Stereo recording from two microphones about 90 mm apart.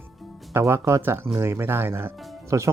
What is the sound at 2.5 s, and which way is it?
Speech, 40° right (ahead or behind).